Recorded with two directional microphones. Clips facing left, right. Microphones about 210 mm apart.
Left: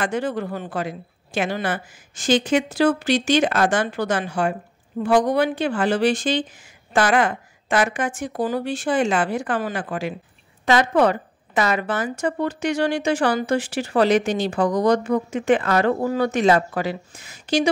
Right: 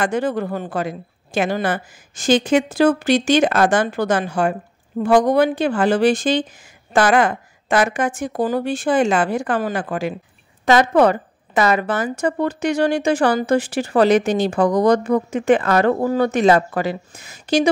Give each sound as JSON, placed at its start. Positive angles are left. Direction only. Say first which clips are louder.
{"t": 0.0, "sound": "a woman's voice", "louder": "right 4 dB", "side_deg": -45}